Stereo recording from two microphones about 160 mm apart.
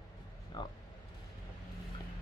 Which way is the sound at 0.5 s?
25° left (ahead or behind).